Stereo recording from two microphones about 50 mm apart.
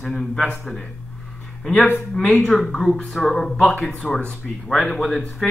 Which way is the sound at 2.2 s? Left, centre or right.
Left.